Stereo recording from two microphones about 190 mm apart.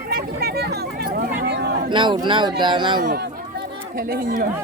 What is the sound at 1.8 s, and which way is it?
Speech, 25° right (ahead or behind).